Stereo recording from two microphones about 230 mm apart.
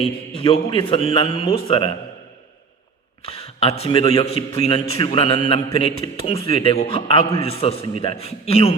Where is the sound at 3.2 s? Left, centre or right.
Left.